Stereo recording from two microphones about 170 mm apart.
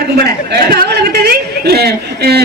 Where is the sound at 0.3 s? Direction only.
65° right (ahead or behind).